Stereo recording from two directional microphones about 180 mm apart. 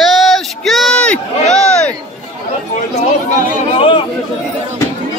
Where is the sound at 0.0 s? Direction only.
Centre (ahead or behind).